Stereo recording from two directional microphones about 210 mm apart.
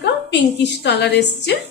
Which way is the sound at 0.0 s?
55° left (ahead or behind).